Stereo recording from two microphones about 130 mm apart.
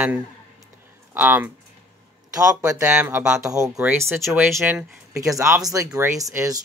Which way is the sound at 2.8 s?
15° right (ahead or behind).